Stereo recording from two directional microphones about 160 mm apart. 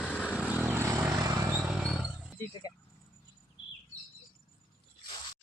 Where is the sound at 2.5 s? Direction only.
25° left (ahead or behind).